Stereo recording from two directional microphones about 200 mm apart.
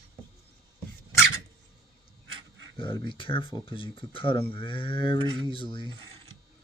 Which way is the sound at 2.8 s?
25° left (ahead or behind).